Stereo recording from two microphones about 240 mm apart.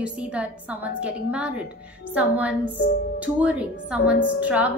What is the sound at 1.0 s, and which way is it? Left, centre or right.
A woman's voice, centre.